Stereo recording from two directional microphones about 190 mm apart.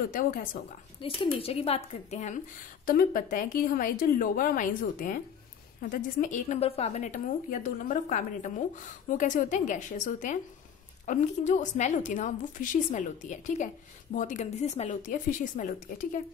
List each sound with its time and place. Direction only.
0.1 s a woman's voice: 45° left (ahead or behind)
1.0 s a woman's voice: 30° left (ahead or behind)